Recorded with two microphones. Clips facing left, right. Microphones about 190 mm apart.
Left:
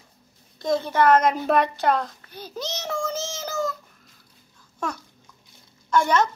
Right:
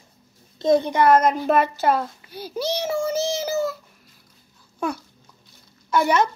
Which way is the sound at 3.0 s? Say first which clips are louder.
Right 6 dB; 10° right (ahead or behind).